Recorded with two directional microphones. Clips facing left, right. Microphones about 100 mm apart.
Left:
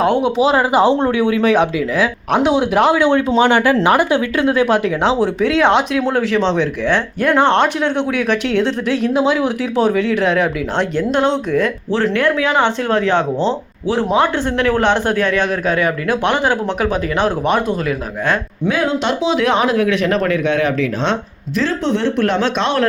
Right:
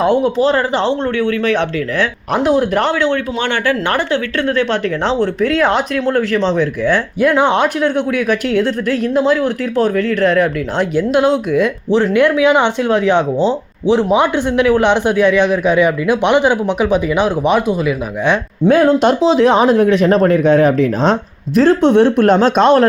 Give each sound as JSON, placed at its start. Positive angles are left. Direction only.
{"t": 0.0, "sound": "speech", "side_deg": 0}
{"t": 2.9, "sound": "speech", "side_deg": 15}
{"t": 18.7, "sound": "speech", "side_deg": -45}